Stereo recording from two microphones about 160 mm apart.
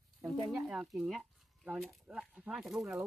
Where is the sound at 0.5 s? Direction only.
5° right (ahead or behind).